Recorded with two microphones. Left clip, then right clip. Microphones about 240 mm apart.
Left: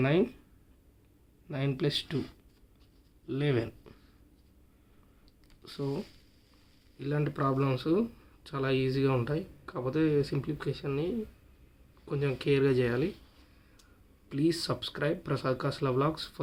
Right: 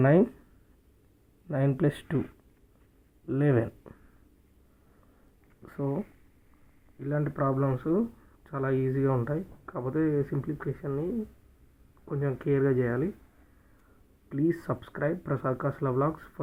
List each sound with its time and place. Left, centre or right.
0.0 s speech: centre
1.5 s speech: centre
3.2 s speech: centre
5.7 s speech: centre
7.0 s speech: centre
14.3 s speech: centre